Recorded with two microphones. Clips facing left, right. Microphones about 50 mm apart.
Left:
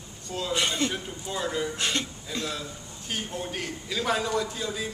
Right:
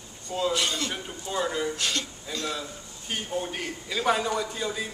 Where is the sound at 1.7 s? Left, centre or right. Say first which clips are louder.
Left 1 dB; left.